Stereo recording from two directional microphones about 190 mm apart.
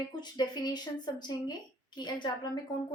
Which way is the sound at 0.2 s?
20° left (ahead or behind).